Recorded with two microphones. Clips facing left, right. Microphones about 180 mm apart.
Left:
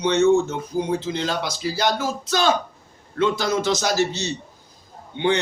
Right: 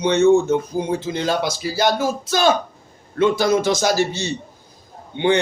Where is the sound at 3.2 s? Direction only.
50° right (ahead or behind).